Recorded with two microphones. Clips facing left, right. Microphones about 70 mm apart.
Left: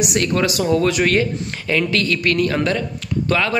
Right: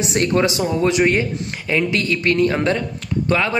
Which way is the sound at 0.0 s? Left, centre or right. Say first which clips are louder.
Right 1 dB; right.